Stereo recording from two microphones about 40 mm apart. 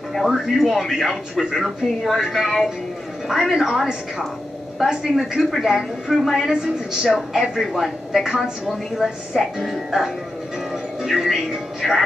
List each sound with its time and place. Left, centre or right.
0.1 s a woman's voice: centre
2.1 s a woman's voice: centre
2.4 s a woman's voice: centre
6.1 s speech: centre
6.5 s a woman's voice: centre
7.5 s a woman's voice: centre